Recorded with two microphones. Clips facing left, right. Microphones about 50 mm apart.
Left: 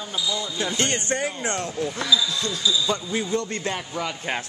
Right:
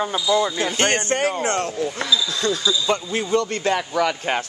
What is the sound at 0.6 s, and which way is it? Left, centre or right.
Speech, right.